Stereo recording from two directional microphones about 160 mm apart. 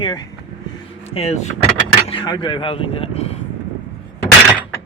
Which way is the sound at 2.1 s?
30° left (ahead or behind).